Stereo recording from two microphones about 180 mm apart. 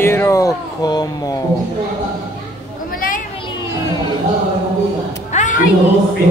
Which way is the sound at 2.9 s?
50° left (ahead or behind).